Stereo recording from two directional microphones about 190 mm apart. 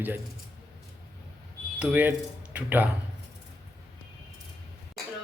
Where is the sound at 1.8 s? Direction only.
10° right (ahead or behind).